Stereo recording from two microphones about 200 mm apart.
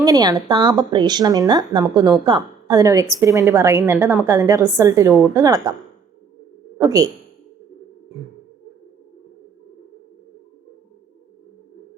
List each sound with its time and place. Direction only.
0.0 s a woman's voice: 20° right (ahead or behind)
6.7 s speech: 15° right (ahead or behind)